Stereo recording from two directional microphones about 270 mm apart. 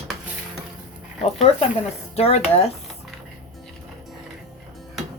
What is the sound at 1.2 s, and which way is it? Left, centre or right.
A woman's voice, left.